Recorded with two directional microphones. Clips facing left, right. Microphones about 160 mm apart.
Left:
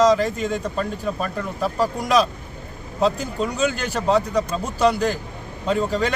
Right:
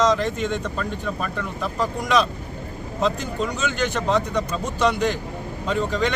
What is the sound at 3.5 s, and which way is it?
Speech, 35° left (ahead or behind).